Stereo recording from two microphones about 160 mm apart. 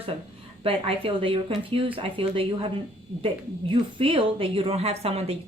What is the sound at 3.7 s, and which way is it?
A woman's voice, 35° right (ahead or behind).